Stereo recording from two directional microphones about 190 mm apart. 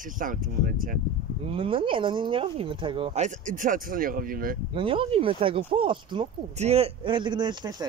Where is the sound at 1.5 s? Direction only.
30° right (ahead or behind).